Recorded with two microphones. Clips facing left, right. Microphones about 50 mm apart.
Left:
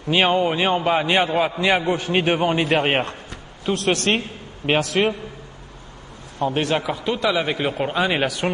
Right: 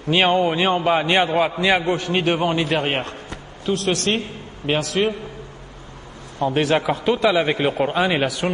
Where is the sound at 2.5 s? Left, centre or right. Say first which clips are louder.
Left 2 dB; left.